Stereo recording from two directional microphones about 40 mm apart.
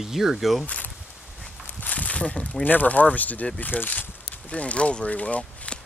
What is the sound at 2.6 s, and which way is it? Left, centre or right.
Speech, left.